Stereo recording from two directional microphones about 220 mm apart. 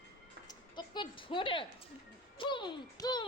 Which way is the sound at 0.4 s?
20° left (ahead or behind).